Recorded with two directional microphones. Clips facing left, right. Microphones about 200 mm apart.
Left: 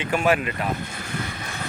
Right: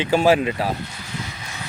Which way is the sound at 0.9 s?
55° left (ahead or behind).